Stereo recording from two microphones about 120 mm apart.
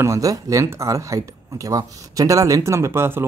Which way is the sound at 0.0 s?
25° right (ahead or behind).